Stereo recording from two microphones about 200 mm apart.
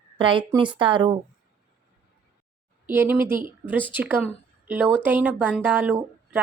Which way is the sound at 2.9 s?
10° right (ahead or behind).